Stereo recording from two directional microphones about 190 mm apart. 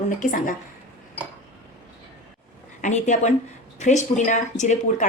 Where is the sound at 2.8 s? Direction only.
40° left (ahead or behind).